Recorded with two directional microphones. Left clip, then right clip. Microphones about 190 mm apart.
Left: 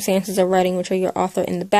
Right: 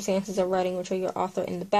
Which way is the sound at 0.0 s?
45° left (ahead or behind).